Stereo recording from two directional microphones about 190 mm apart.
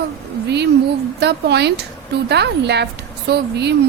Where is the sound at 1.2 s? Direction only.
60° right (ahead or behind).